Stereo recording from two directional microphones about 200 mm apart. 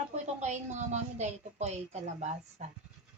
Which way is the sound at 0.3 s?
35° right (ahead or behind).